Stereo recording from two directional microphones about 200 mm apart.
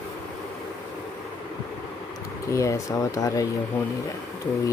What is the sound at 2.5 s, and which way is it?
Speech, 15° left (ahead or behind).